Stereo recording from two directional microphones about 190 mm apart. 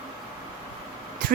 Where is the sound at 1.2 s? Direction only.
50° right (ahead or behind).